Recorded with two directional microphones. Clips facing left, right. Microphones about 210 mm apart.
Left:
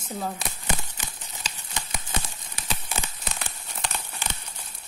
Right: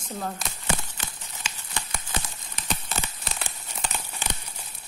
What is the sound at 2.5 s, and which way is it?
Crumpling, 5° left (ahead or behind).